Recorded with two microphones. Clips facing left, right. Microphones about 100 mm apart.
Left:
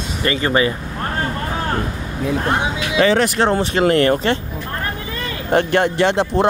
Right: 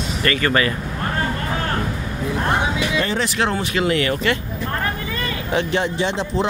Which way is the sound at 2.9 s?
90° left.